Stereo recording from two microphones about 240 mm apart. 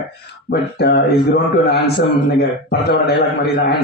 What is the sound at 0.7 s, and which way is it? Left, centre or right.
Speech, left.